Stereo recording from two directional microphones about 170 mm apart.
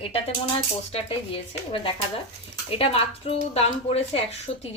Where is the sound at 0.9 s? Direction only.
35° left (ahead or behind).